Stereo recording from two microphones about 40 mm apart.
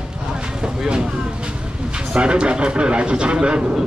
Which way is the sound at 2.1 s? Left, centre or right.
Right.